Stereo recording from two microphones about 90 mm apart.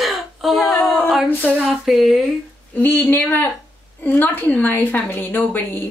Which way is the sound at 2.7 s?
20° left (ahead or behind).